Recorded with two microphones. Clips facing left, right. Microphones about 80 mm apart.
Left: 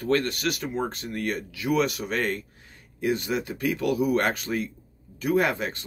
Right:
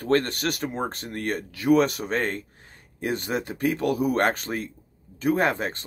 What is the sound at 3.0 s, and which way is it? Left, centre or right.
Speech, right.